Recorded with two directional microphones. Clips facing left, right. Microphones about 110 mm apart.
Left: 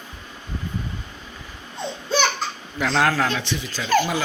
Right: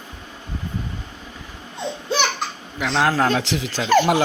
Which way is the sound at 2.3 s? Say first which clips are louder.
Even; 15° right (ahead or behind).